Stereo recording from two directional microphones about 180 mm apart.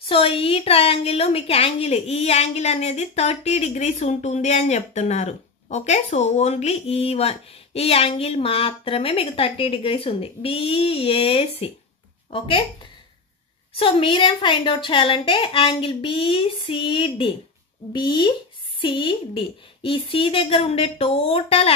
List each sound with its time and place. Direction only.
0.0 s a woman's voice: 30° left (ahead or behind)
13.7 s a woman's voice: 30° left (ahead or behind)